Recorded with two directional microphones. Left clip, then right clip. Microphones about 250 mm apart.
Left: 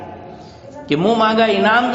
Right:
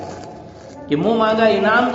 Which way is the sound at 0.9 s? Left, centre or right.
Left.